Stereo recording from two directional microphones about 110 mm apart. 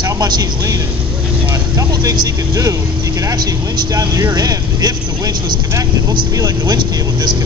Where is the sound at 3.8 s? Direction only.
30° right (ahead or behind).